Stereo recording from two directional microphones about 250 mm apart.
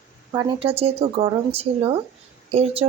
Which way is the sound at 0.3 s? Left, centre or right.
Centre.